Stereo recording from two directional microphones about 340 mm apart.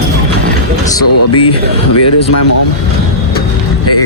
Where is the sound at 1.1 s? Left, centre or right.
Left.